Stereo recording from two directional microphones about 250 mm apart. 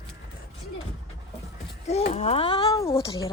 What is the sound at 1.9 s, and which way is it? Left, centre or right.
Speech, left.